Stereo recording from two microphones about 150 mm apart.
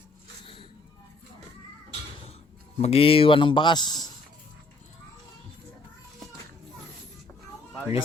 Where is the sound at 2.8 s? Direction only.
45° left (ahead or behind).